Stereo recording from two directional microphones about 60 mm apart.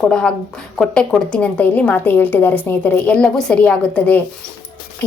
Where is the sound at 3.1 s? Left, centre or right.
Centre.